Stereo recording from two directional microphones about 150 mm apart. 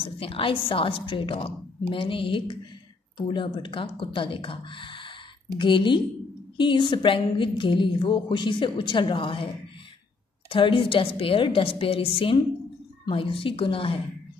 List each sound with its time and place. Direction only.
0.0 s a woman's voice: 40° left (ahead or behind)
10.5 s a woman's voice: 35° left (ahead or behind)